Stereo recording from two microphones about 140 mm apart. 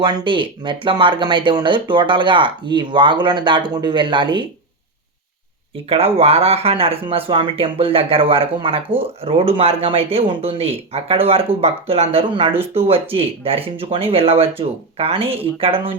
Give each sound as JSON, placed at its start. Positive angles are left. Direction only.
{"t": 0.0, "sound": "speech", "side_deg": -35}
{"t": 5.7, "sound": "speech", "side_deg": -45}